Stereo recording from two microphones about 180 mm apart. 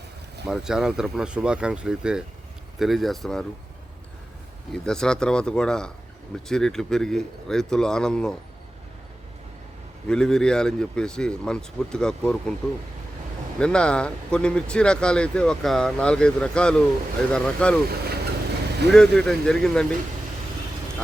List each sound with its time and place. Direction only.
0.4 s speech: 5° right (ahead or behind)
4.7 s speech: 5° left (ahead or behind)
10.1 s speech: 5° left (ahead or behind)
13.6 s speech: 5° left (ahead or behind)
17.8 s speech: 60° right (ahead or behind)
18.9 s speech: centre (ahead or behind)